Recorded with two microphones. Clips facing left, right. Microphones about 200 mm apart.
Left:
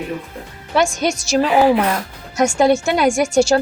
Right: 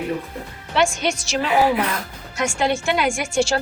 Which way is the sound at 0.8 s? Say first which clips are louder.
Left 3 dB; 40° left (ahead or behind).